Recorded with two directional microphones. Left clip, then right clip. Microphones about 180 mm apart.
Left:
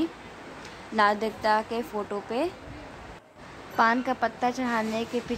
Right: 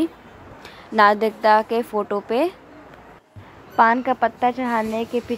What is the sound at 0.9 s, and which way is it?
A woman's voice, 30° right (ahead or behind).